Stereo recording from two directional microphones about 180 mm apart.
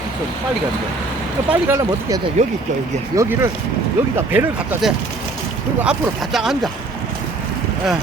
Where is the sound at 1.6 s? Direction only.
15° right (ahead or behind); by 6.7 s centre (ahead or behind).